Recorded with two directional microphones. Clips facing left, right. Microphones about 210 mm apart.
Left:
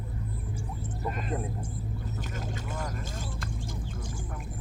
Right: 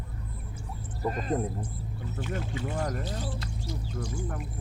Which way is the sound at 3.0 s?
50° left (ahead or behind).